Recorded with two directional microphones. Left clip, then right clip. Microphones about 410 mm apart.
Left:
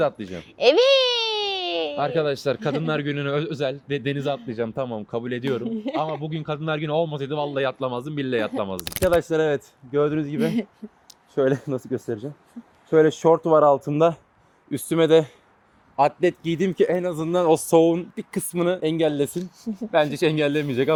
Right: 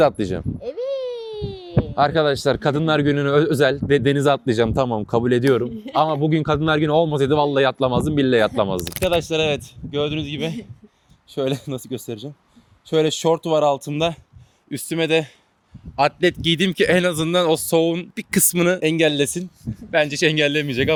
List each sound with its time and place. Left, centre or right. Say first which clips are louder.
0.0 s speech: right 7 dB; right
0.6 s a sound: left 12 dB; left
2.0 s speech: right 9 dB; right
8.7 s speech: right 3 dB; centre
9.1 s speech: right 1 dB; right
13.7 s speech: left 3 dB; centre
16.0 s speech: right 2 dB; right
18.1 s speech: right 7 dB; right